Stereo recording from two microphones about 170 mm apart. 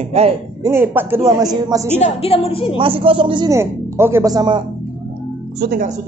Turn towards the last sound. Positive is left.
turn(degrees=-70)  # may be behind; listen again after turning